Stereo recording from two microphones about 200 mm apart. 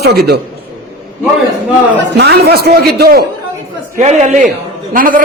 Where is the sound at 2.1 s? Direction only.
55° right (ahead or behind).